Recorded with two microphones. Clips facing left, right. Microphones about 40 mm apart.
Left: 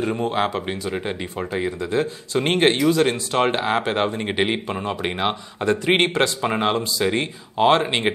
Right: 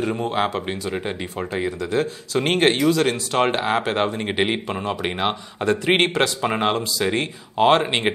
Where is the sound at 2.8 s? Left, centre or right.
Left.